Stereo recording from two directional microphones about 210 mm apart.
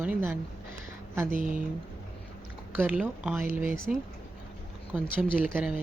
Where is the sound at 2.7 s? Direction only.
5° right (ahead or behind).